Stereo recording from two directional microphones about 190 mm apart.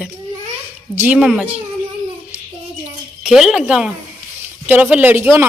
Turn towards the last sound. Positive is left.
turn(degrees=-10)  # may be behind; listen again after turning